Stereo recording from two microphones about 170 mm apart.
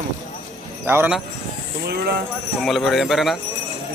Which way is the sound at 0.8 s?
10° right (ahead or behind).